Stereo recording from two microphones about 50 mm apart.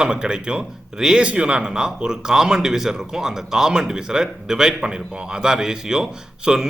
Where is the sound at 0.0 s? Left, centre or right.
Centre.